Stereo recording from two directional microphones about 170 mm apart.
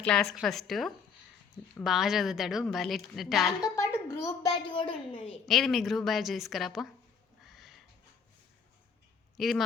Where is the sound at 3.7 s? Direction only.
15° left (ahead or behind).